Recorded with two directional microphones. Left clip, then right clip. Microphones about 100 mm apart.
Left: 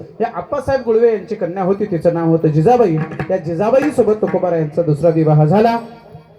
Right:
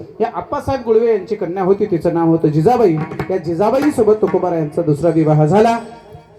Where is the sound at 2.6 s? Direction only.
20° left (ahead or behind).